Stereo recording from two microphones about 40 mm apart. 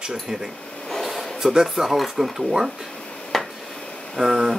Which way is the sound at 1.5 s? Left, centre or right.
Centre.